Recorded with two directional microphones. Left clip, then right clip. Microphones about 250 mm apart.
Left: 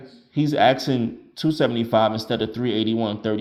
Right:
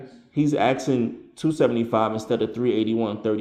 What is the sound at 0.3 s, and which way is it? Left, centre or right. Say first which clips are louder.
Speech: left 3 dB; left.